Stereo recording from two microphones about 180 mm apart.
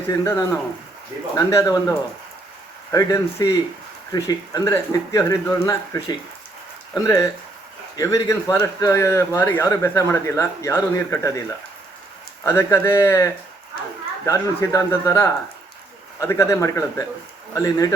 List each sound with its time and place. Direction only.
0.1 s a man's voice: 15° left (ahead or behind)
12.4 s a man's voice: 15° left (ahead or behind)